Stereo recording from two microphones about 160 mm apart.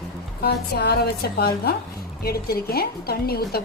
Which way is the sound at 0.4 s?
90° left.